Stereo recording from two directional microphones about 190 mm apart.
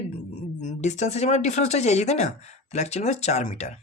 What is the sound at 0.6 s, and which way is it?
Speech, 40° left (ahead or behind).